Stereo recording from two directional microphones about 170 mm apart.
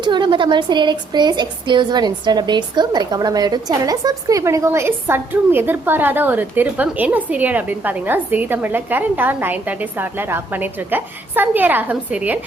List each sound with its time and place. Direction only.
0.0 s a woman's voice: 25° right (ahead or behind); by 12.4 s 10° right (ahead or behind)